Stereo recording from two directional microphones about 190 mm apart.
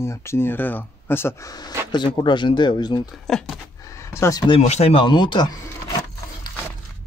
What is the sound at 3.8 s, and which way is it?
Speech, 15° left (ahead or behind).